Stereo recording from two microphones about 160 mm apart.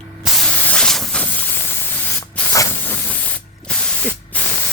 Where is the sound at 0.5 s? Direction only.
5° left (ahead or behind).